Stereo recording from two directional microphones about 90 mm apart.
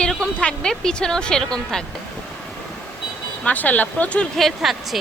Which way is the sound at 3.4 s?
20° left (ahead or behind).